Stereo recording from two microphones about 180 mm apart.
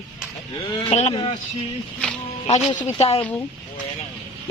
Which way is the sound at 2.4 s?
30° left (ahead or behind).